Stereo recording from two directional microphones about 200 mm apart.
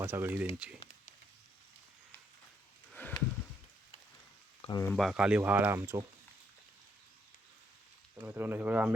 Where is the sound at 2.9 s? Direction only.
5° left (ahead or behind).